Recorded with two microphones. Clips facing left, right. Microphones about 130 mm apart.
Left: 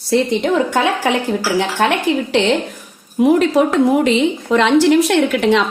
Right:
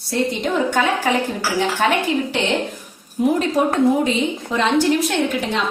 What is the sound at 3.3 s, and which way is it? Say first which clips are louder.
A woman's voice: left 5 dB; 90° left.